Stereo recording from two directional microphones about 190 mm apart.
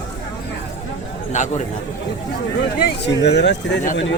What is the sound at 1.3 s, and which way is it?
Speech, 40° left (ahead or behind).